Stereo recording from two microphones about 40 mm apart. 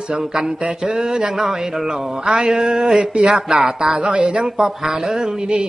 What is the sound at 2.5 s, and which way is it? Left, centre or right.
Speech, centre.